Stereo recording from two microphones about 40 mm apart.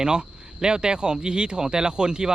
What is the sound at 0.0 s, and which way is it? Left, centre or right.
Speech, right.